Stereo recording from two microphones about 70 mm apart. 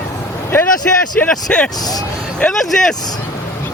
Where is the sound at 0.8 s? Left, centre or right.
Left.